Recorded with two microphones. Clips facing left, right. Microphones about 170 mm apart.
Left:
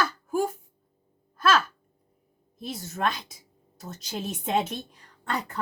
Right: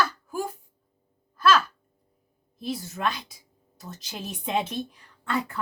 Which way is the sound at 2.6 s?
45° left (ahead or behind).